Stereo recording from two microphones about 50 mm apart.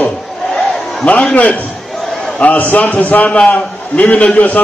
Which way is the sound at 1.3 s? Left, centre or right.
Left.